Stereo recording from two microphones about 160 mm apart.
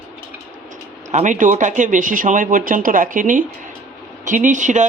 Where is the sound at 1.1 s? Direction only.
50° right (ahead or behind).